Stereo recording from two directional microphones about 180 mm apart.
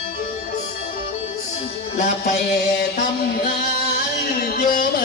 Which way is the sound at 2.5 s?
65° left (ahead or behind).